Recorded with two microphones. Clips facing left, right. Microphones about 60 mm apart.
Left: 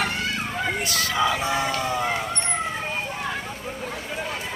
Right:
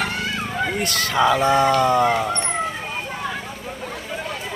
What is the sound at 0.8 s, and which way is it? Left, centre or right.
Speech, right.